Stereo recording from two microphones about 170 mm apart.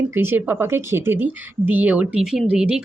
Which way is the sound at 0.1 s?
15° right (ahead or behind).